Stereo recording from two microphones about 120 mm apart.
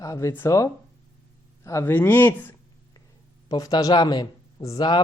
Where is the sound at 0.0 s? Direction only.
25° left (ahead or behind).